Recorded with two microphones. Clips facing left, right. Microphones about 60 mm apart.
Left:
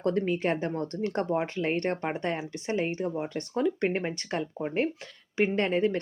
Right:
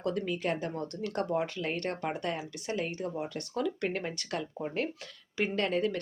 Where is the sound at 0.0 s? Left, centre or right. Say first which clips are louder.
Left 5 dB; left.